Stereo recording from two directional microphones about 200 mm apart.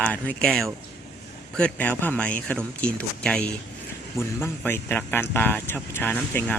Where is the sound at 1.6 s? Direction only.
5° left (ahead or behind).